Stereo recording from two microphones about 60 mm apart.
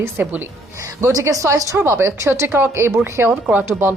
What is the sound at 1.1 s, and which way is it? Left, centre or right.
Speech, right.